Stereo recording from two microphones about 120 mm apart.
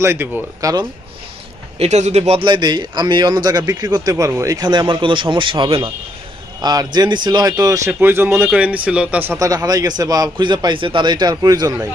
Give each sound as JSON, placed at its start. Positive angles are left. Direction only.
{"t": 0.0, "sound": "speech", "side_deg": -20}
{"t": 0.6, "sound": "speech", "side_deg": -30}
{"t": 1.8, "sound": "speech", "side_deg": -70}
{"t": 2.4, "sound": "speech", "side_deg": -40}
{"t": 6.6, "sound": "speech", "side_deg": -35}
{"t": 8.0, "sound": "a man's voice", "side_deg": -20}
{"t": 9.4, "sound": "speech", "side_deg": -30}